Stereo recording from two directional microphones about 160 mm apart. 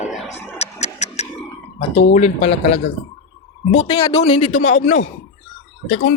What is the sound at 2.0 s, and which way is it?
Speech, 45° left (ahead or behind).